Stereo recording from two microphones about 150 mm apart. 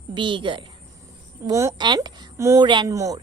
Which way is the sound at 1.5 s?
20° right (ahead or behind).